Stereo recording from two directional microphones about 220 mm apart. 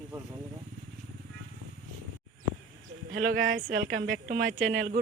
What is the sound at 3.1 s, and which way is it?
Speech, 40° right (ahead or behind).